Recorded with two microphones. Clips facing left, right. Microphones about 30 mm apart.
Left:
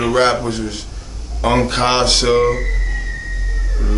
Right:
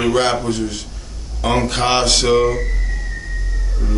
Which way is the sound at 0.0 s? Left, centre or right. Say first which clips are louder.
Left 2 dB; centre.